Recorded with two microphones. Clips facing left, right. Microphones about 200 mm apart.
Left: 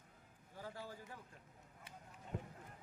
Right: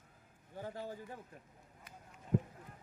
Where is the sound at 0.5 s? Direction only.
20° right (ahead or behind).